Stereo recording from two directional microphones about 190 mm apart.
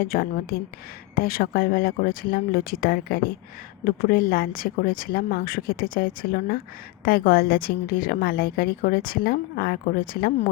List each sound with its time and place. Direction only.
0.0 s a woman's voice: 55° left (ahead or behind)